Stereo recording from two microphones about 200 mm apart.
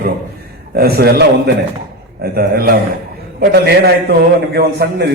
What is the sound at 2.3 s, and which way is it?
A man's voice, 50° right (ahead or behind).